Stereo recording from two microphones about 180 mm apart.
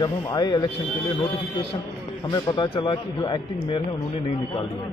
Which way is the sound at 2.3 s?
25° left (ahead or behind).